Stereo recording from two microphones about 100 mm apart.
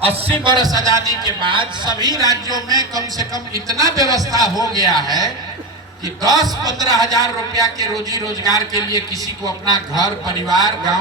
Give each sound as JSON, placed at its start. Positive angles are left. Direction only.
{"t": 0.0, "sound": "a man's voice", "side_deg": -75}
{"t": 0.5, "sound": "a man's voice", "side_deg": -40}
{"t": 1.4, "sound": "a man's voice", "side_deg": -55}
{"t": 2.0, "sound": "a man's voice", "side_deg": -40}
{"t": 9.9, "sound": "a man's voice", "side_deg": -40}